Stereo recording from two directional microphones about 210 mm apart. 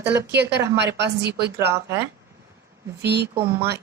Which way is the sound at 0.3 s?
55° right (ahead or behind).